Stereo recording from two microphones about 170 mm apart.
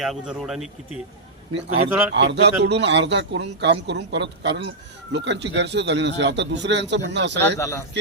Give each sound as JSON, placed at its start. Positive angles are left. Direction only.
{"t": 0.0, "sound": "speech", "side_deg": 0}
{"t": 2.1, "sound": "a man's voice", "side_deg": -90}
{"t": 7.6, "sound": "a man's voice", "side_deg": 15}